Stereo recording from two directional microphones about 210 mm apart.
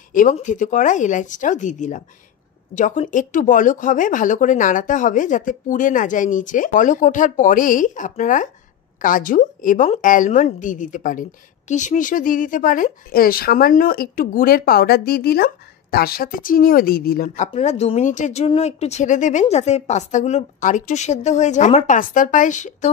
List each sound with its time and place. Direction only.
0.1 s a woman's voice: 40° left (ahead or behind)
17.6 s a woman's voice: 30° left (ahead or behind)